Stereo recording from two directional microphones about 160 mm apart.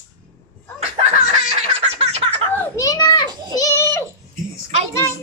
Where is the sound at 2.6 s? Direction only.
20° left (ahead or behind).